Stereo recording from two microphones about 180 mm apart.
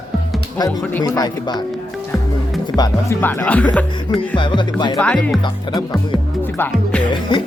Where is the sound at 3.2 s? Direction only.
10° left (ahead or behind).